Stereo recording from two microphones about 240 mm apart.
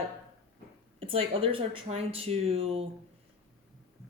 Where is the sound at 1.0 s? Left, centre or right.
Right.